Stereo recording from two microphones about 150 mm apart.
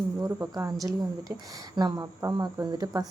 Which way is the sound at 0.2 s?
25° right (ahead or behind).